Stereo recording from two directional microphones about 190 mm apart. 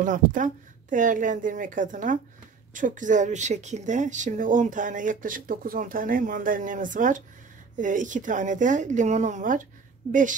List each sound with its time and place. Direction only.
0.0 s a woman's voice: 45° right (ahead or behind)